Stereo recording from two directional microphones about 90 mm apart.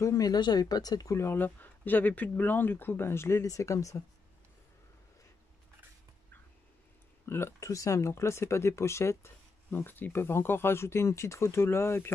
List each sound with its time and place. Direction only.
0.0 s speech: 40° left (ahead or behind)
1.1 s speech: 25° left (ahead or behind)
7.2 s speech: 30° left (ahead or behind)